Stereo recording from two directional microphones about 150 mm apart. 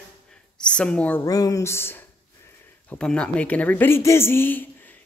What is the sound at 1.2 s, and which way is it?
Speech, 25° left (ahead or behind).